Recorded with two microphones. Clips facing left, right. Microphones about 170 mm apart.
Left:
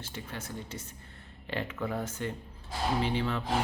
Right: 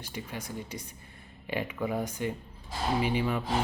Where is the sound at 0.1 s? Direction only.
15° right (ahead or behind).